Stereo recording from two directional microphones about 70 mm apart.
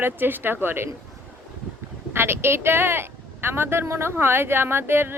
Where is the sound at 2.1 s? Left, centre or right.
Right.